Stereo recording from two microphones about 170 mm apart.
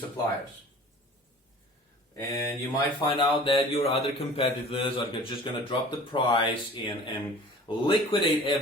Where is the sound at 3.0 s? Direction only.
30° left (ahead or behind).